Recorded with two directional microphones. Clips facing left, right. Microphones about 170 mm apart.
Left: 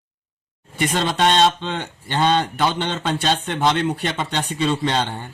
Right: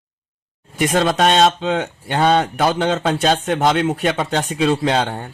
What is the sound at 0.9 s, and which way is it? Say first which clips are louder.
Speech: right 4 dB; 60° right (ahead or behind).